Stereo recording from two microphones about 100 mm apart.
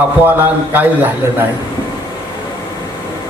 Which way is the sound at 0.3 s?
20° right (ahead or behind).